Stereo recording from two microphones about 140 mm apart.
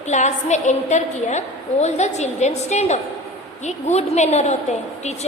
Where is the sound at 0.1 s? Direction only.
55° left (ahead or behind).